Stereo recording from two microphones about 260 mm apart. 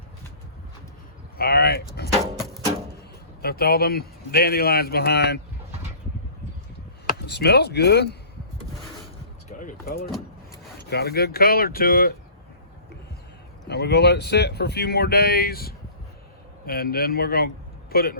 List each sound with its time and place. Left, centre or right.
1.4 s a sound: left
3.4 s speech: left
7.1 s speech: left
9.5 s speech: left
13.7 s a man's voice: left